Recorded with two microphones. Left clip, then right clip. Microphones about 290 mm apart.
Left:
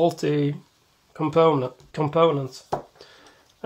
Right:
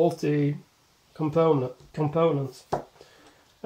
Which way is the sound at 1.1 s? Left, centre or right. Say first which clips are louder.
Left 4 dB; left.